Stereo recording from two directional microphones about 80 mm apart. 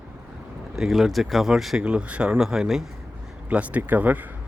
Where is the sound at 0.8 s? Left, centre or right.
Centre.